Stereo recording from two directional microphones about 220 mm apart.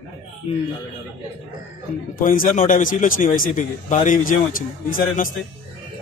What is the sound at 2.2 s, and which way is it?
A man's voice, 35° left (ahead or behind).